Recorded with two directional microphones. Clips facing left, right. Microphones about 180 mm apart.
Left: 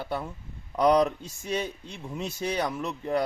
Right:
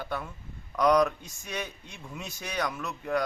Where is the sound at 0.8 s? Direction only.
30° left (ahead or behind).